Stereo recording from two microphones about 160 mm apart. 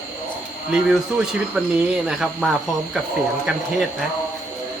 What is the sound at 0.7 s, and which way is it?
Speech, 5° right (ahead or behind).